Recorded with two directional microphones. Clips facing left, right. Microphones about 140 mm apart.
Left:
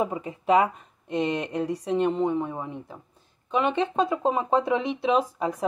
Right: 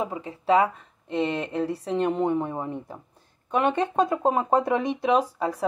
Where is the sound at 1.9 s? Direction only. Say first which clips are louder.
Left 2 dB; 10° left (ahead or behind).